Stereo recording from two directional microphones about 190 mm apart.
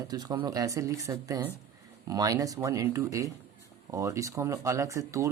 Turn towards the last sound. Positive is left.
turn(degrees=-15)  # may be behind; listen again after turning